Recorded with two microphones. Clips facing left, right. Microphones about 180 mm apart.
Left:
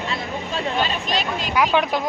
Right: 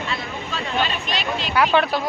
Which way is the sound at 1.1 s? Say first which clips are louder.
Left 1 dB; 45° left (ahead or behind).